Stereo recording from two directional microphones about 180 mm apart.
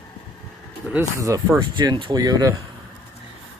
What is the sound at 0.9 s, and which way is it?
Speech, 15° right (ahead or behind).